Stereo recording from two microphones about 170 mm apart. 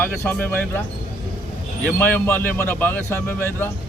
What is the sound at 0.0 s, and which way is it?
Speech, 10° left (ahead or behind).